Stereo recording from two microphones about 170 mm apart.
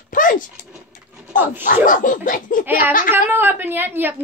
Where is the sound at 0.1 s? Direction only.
50° left (ahead or behind).